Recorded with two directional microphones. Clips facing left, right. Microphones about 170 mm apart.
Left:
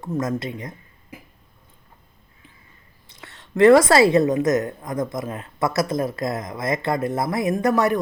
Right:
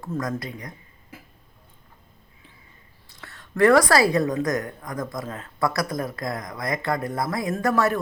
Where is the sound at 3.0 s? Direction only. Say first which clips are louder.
Left 1 dB; 20° left (ahead or behind).